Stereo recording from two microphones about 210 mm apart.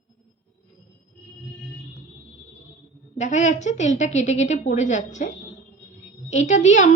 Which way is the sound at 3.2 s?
35° left (ahead or behind).